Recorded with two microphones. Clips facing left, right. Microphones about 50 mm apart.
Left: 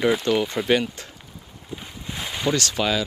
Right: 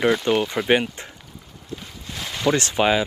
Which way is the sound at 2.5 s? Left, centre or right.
Right.